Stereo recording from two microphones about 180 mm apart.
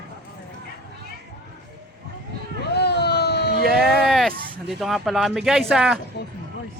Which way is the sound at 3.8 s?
Centre (ahead or behind).